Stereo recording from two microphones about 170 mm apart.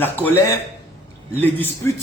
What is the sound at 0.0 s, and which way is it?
A man's voice, 10° left (ahead or behind).